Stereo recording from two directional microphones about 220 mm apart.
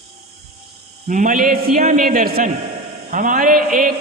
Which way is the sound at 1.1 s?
35° right (ahead or behind).